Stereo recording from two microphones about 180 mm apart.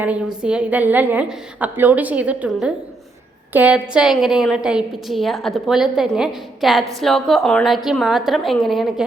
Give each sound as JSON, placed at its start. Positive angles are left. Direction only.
{"t": 0.4, "sound": "a woman's voice", "side_deg": -5}